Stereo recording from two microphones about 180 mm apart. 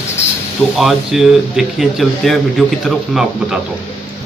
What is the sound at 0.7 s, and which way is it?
Speech, centre (ahead or behind).